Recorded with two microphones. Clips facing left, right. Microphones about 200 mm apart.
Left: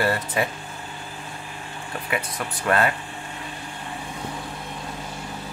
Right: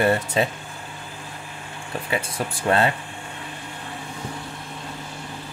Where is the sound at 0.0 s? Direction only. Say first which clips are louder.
Right 3 dB; 25° right (ahead or behind).